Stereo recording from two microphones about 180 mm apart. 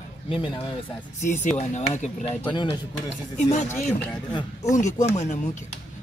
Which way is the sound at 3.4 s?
40° left (ahead or behind).